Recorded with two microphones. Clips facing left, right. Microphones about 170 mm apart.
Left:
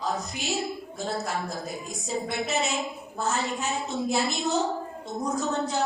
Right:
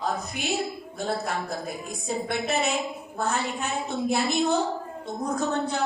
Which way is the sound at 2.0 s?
55° right (ahead or behind).